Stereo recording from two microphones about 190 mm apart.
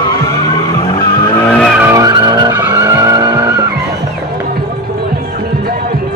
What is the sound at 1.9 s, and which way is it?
Vehicle, 20° right (ahead or behind).